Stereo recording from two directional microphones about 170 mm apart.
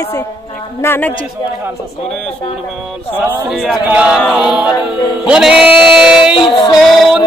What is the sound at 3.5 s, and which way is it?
Music, centre (ahead or behind).